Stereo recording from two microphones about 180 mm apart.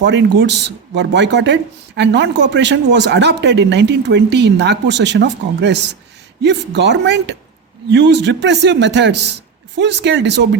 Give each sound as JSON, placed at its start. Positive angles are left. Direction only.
{"t": 0.0, "sound": "speech", "side_deg": -75}